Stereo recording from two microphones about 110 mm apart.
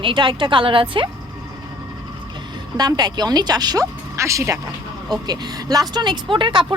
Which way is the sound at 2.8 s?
35° right (ahead or behind).